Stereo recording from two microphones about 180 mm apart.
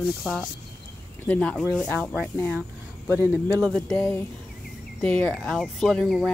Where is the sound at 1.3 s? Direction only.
5° left (ahead or behind).